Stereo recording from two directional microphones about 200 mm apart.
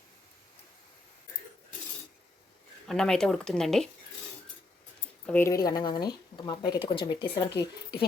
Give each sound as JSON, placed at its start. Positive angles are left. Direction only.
{"t": 2.8, "sound": "speech", "side_deg": 5}
{"t": 5.2, "sound": "speech", "side_deg": 10}